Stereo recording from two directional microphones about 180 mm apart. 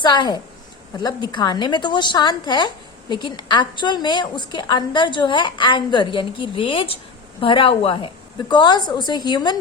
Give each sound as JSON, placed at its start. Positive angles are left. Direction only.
{"t": 0.0, "sound": "a woman's voice", "side_deg": 25}